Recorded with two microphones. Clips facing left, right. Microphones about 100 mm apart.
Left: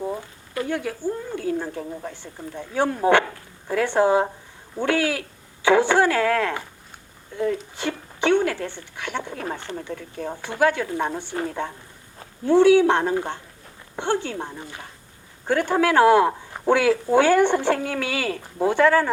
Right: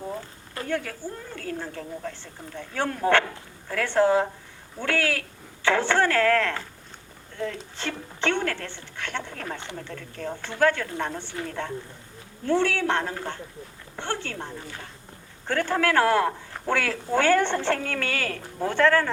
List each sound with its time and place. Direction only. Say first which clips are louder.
0.7 s speech: left 2 dB; 15° left (ahead or behind)